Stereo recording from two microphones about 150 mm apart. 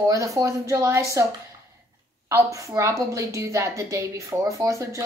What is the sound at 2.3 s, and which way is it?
A woman's voice, 20° right (ahead or behind).